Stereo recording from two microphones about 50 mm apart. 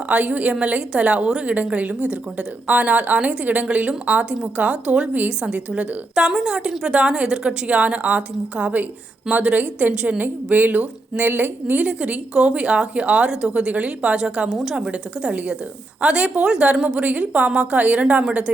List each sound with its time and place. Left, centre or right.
0.1 s a woman's voice: right
11.8 s a woman's voice: right; by 14.8 s centre
14.8 s a woman's voice: right